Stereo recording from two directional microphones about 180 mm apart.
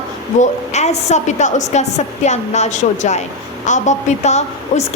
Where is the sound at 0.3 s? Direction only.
40° left (ahead or behind).